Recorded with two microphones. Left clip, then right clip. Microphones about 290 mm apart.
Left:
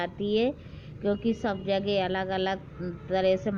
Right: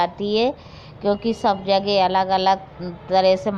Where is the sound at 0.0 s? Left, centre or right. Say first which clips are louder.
Right 8 dB; centre.